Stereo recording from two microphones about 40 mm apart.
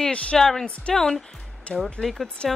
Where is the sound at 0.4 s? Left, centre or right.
Centre.